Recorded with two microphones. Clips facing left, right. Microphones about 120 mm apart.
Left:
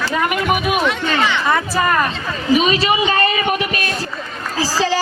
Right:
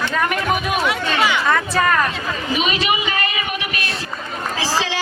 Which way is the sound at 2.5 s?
35° left (ahead or behind).